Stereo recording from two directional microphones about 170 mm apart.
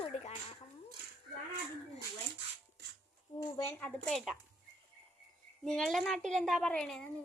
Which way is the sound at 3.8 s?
5° left (ahead or behind).